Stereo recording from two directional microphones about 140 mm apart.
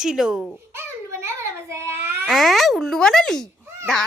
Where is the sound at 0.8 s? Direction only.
20° right (ahead or behind).